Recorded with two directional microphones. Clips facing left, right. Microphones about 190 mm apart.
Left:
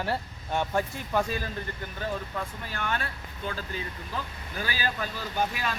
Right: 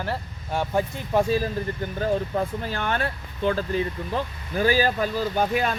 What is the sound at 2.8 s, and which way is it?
Speech, 50° right (ahead or behind).